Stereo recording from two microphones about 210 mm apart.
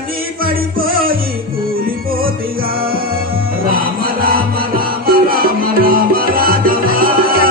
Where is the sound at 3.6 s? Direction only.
45° right (ahead or behind).